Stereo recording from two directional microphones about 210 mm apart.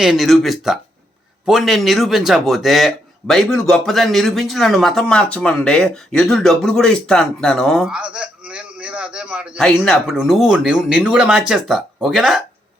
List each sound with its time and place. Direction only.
0.0 s speech: centre (ahead or behind)